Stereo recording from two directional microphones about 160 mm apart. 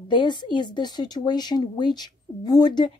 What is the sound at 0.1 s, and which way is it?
Speech, 30° left (ahead or behind).